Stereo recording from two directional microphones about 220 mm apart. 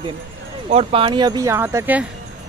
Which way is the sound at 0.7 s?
25° right (ahead or behind).